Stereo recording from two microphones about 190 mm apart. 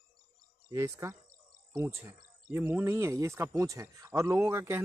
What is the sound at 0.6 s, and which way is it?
Speech, 15° right (ahead or behind).